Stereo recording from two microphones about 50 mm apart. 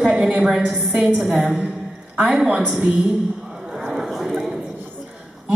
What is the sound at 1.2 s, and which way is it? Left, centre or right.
A woman's voice, centre.